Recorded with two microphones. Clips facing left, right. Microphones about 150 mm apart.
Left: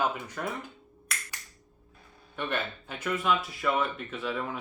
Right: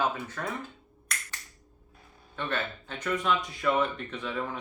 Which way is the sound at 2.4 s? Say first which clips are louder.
Even; 10° left (ahead or behind).